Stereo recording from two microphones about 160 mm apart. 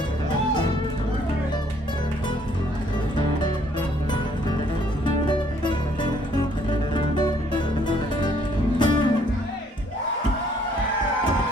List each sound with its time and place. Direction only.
5.0 s music: 30° left (ahead or behind)